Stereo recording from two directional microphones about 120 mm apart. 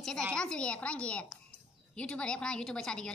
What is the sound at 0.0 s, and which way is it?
A woman's voice, 5° left (ahead or behind).